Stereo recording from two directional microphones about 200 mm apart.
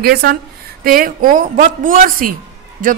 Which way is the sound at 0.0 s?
50° right (ahead or behind).